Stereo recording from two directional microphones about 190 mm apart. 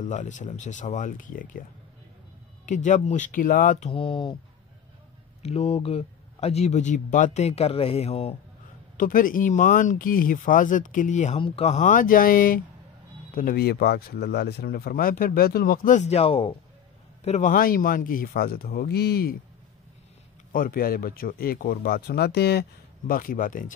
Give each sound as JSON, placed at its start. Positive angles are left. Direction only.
{"t": 0.0, "sound": "speech", "side_deg": 40}
{"t": 2.6, "sound": "speech", "side_deg": 40}
{"t": 5.4, "sound": "speech", "side_deg": 35}
{"t": 8.9, "sound": "speech", "side_deg": 45}
{"t": 20.5, "sound": "speech", "side_deg": 50}